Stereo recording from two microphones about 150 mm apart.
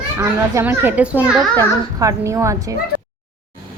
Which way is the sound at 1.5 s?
25° right (ahead or behind).